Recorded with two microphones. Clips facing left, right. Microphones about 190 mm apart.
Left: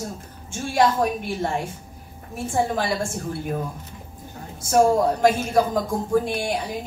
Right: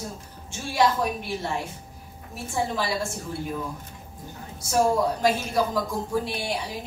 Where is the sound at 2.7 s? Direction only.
50° left (ahead or behind).